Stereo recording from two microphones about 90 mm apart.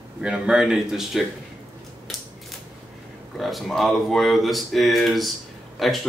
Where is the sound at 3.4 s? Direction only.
Centre (ahead or behind).